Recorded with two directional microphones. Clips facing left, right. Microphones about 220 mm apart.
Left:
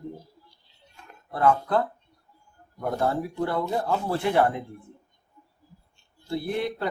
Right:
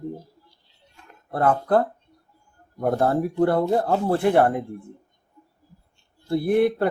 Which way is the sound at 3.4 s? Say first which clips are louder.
Right 8 dB; 55° right (ahead or behind).